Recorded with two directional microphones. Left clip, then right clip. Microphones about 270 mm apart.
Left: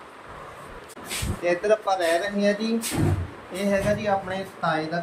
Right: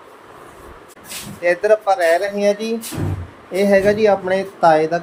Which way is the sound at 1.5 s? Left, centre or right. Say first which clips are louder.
Right 7 dB; centre.